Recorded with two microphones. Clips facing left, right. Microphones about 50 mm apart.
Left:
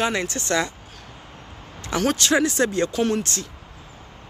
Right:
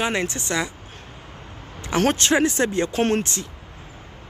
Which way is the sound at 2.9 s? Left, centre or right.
Right.